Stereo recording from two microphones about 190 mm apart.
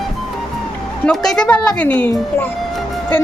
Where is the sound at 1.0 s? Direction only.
Centre (ahead or behind).